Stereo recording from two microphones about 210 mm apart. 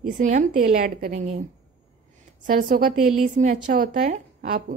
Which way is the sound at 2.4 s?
40° right (ahead or behind).